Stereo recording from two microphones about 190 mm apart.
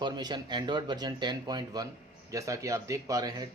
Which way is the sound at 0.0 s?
20° right (ahead or behind).